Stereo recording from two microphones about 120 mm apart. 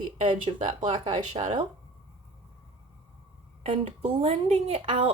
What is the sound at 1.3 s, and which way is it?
Speech, 70° right (ahead or behind).